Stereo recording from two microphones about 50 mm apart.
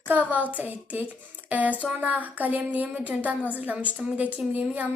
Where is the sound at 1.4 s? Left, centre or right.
Right.